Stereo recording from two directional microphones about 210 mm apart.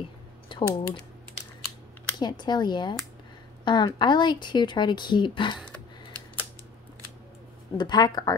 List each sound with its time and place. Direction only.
0.5 s speech: 20° left (ahead or behind)
2.1 s speech: 20° left (ahead or behind)
7.7 s speech: 20° left (ahead or behind)